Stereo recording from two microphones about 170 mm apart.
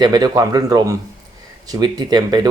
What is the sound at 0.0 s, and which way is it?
Speech, 25° right (ahead or behind).